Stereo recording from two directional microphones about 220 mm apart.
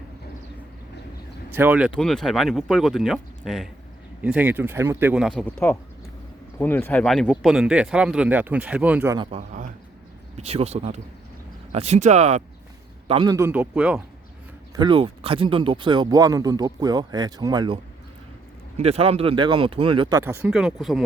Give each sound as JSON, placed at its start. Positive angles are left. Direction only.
{"t": 1.5, "sound": "speech", "side_deg": -10}
{"t": 9.1, "sound": "speech", "side_deg": -25}
{"t": 14.8, "sound": "speech", "side_deg": -25}
{"t": 18.8, "sound": "speech", "side_deg": -30}